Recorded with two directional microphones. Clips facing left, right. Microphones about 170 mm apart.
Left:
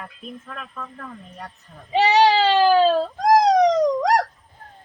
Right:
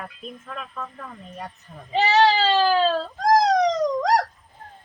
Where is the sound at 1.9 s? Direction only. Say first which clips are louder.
Left 2 dB; 15° left (ahead or behind).